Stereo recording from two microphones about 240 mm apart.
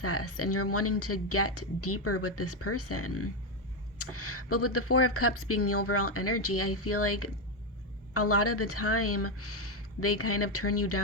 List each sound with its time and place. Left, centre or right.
0.0 s speech: left